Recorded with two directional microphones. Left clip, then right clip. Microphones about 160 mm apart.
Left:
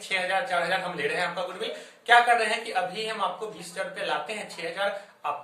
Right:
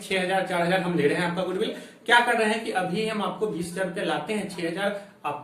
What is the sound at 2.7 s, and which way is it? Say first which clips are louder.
Speech: right 2 dB; 5° right (ahead or behind).